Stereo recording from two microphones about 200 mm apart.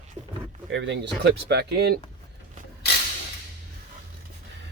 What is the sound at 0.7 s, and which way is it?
Speech, 60° right (ahead or behind).